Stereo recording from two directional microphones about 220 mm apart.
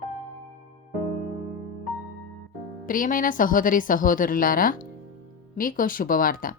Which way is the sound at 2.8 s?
40° left (ahead or behind).